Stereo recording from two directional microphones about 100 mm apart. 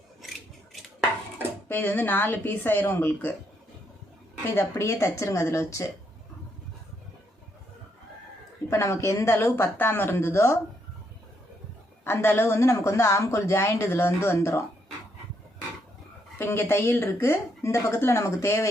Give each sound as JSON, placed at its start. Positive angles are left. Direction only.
{"t": 0.2, "sound": "mechanisms", "side_deg": 0}
{"t": 1.6, "sound": "speech", "side_deg": 25}
{"t": 4.4, "sound": "speech", "side_deg": 30}
{"t": 8.7, "sound": "speech", "side_deg": 30}
{"t": 12.0, "sound": "speech", "side_deg": 25}
{"t": 16.4, "sound": "speech", "side_deg": 25}